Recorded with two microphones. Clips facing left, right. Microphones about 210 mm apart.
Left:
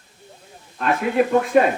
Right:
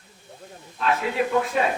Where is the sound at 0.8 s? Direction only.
55° left (ahead or behind).